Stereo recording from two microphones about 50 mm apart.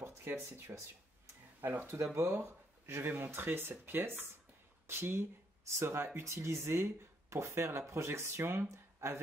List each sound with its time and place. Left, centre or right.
0.0 s speech: right
1.7 s speech: right
2.1 s speech: right